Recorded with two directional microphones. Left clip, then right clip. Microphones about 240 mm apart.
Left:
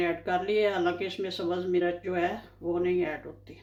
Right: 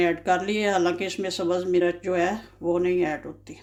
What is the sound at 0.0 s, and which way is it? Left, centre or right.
Speech, right.